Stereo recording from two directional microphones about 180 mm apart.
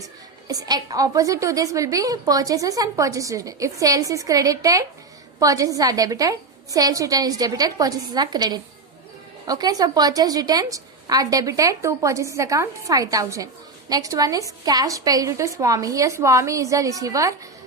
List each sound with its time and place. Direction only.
0.0 s a woman's voice: 20° right (ahead or behind)